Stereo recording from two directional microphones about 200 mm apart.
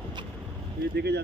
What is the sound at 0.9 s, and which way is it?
Speech, 55° right (ahead or behind).